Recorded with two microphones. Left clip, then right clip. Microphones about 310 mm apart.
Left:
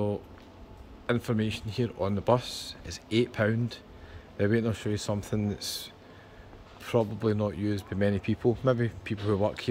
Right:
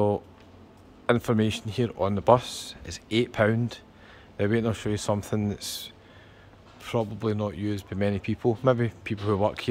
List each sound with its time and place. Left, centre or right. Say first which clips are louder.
1.0 s speech: right 6 dB; centre